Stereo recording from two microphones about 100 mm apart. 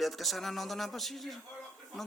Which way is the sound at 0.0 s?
Centre (ahead or behind).